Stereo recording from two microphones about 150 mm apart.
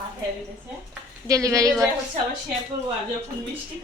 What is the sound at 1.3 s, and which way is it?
Speech, 20° right (ahead or behind).